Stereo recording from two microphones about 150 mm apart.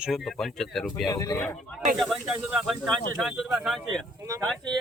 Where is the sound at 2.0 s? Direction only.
5° right (ahead or behind).